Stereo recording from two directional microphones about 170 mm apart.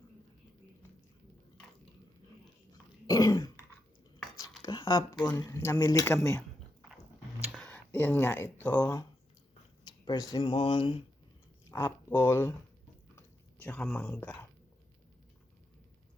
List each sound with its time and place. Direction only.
3.1 s throat clearing: 20° left (ahead or behind)
4.6 s a sound: 30° left (ahead or behind)
5.4 s speech: 20° left (ahead or behind)
7.5 s a sound: 5° left (ahead or behind)
8.5 s speech: 10° left (ahead or behind)
9.8 s a sound: 25° left (ahead or behind)
10.3 s speech: 30° left (ahead or behind)
11.7 s speech: 20° left (ahead or behind)
13.1 s chewing: 10° left (ahead or behind)